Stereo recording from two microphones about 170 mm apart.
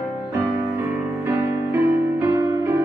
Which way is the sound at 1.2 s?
15° right (ahead or behind).